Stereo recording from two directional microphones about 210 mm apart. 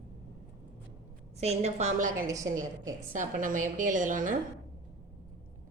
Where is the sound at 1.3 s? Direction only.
30° right (ahead or behind).